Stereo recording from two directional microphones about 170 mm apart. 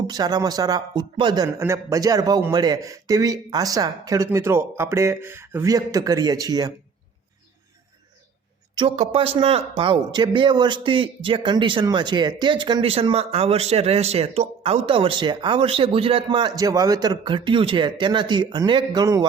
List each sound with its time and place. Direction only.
0.1 s a man's voice: 25° right (ahead or behind)
1.5 s a man's voice: 15° right (ahead or behind)
9.0 s a man's voice: 35° right (ahead or behind)